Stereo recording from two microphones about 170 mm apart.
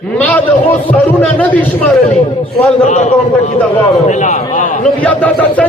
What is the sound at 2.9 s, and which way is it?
A man's voice, 40° left (ahead or behind).